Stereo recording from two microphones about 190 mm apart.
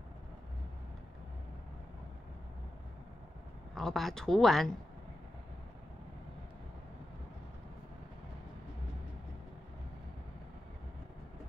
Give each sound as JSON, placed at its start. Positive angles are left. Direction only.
{"t": 3.7, "sound": "a woman's voice", "side_deg": 0}